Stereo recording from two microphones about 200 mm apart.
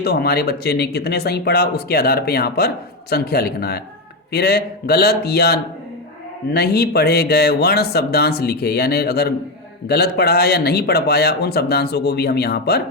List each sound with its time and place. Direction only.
0.0 s speech: 50° left (ahead or behind)